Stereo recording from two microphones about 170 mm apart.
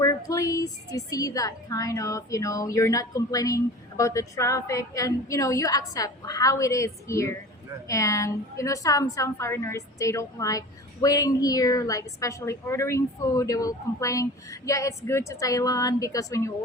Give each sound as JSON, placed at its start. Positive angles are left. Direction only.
{"t": 0.0, "sound": "a woman's voice", "side_deg": 20}